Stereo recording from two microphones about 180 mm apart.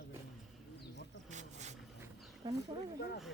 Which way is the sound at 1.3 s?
40° right (ahead or behind).